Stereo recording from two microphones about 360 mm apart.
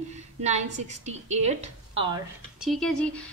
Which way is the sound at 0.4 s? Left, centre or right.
Centre.